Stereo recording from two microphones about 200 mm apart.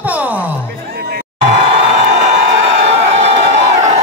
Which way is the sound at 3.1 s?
35° right (ahead or behind).